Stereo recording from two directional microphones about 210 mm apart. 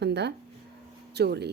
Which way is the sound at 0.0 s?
55° right (ahead or behind).